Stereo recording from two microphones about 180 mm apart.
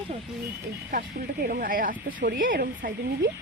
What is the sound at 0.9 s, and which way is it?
Speech, 50° right (ahead or behind).